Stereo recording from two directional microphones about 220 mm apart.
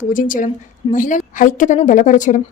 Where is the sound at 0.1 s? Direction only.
35° left (ahead or behind).